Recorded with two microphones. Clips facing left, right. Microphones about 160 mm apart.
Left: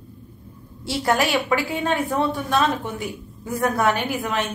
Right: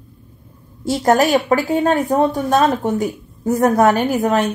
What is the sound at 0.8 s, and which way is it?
A woman's voice, 45° right (ahead or behind).